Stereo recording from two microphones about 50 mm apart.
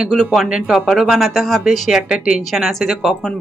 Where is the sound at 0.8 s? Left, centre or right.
Centre.